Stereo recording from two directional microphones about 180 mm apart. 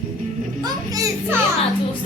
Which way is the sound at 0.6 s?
20° right (ahead or behind).